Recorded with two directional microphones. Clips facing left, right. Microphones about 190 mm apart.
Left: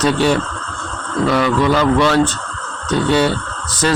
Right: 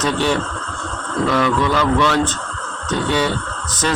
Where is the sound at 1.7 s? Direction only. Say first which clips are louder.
Left 3 dB; 35° left (ahead or behind).